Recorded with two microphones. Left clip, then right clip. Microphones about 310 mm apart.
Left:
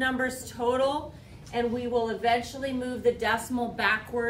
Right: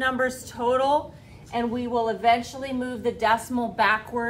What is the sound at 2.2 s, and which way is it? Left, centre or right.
A woman's voice, centre.